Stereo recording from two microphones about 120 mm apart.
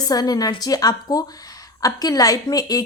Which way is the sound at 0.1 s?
30° left (ahead or behind).